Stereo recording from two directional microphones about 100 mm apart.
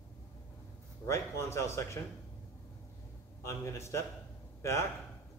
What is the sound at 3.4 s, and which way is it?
Speech, 30° left (ahead or behind).